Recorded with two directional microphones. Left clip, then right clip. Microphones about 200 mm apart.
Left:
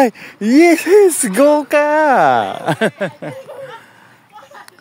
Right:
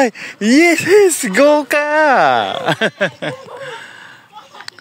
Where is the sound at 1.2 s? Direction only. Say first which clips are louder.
Right 1 dB; 15° left (ahead or behind).